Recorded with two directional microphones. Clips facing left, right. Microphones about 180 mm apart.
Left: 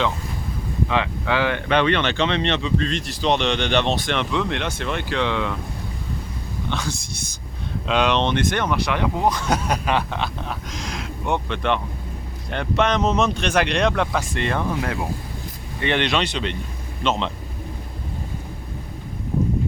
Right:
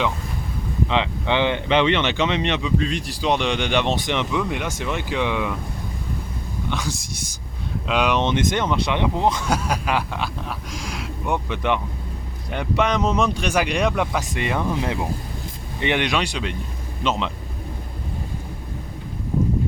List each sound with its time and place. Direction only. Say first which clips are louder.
0.9 s speech: right 1 dB; 20° right (ahead or behind)
6.7 s speech: even; 15° right (ahead or behind)
8.3 s speech: right 1 dB; 20° right (ahead or behind)
9.5 s speech: left 1 dB; 5° right (ahead or behind)
13.0 s speech: left 1 dB; 25° left (ahead or behind)
13.2 s speech: left 1 dB; 10° right (ahead or behind)